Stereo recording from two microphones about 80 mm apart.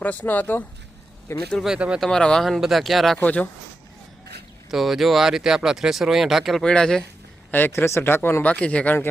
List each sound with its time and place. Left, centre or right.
0.0 s speech: centre
1.6 s speech: centre
2.0 s speech: centre
3.2 s speech: centre
4.7 s speech: centre
6.6 s speech: centre
7.5 s speech: left